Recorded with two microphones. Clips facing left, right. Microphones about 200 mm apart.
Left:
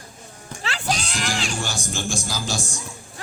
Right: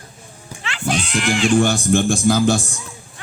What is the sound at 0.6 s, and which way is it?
Speech, 35° left (ahead or behind).